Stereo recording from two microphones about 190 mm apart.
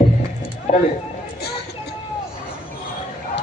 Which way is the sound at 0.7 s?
35° left (ahead or behind).